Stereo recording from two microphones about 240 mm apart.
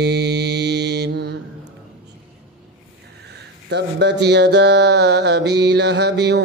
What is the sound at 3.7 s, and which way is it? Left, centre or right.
Speech, right.